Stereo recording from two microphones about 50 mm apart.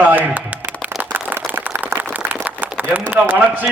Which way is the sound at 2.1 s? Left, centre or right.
Right.